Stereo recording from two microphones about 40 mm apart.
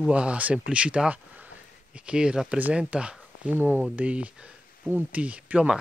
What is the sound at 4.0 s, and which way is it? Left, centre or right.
Speech, right.